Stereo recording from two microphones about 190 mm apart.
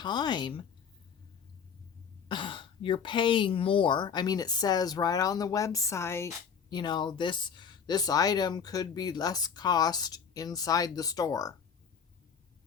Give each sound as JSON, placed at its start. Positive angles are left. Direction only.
{"t": 0.0, "sound": "speech", "side_deg": 25}
{"t": 2.2, "sound": "speech", "side_deg": 25}